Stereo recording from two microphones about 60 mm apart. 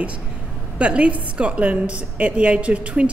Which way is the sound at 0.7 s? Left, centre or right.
Centre.